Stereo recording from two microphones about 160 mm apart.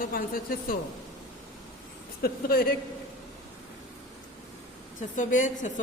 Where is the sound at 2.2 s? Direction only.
70° left (ahead or behind).